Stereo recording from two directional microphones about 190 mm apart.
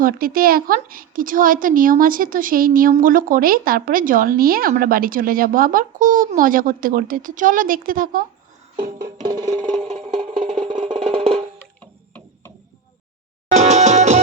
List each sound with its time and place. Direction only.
0.0 s a woman's voice: 50° right (ahead or behind)
9.2 s music: 20° right (ahead or behind)
9.6 s music: 35° right (ahead or behind)
10.8 s music: 30° right (ahead or behind)
11.8 s music: 10° left (ahead or behind)
13.5 s music: 35° right (ahead or behind)